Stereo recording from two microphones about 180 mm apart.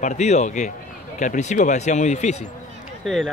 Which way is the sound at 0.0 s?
40° left (ahead or behind).